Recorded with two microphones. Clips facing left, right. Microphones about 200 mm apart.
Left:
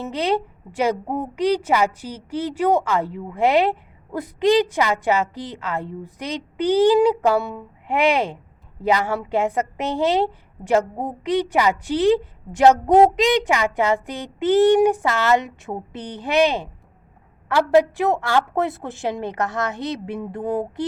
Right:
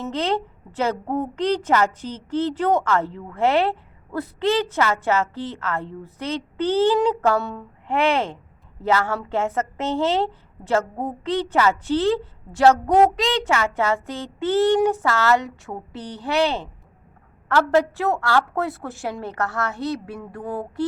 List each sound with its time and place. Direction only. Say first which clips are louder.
0.0 s a woman's voice: left 2 dB; 10° left (ahead or behind)